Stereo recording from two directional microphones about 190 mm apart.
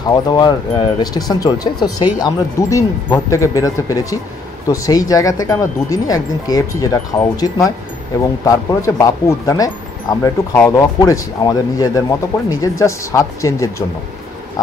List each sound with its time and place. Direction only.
0.0 s speech: 20° left (ahead or behind)